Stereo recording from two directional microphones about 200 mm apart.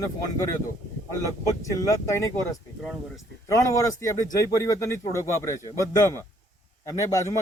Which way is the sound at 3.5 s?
15° left (ahead or behind).